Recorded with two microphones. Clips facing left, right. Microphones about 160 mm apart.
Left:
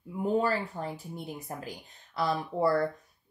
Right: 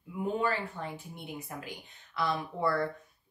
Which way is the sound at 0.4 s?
35° left (ahead or behind).